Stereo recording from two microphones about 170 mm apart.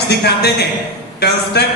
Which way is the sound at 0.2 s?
75° left (ahead or behind).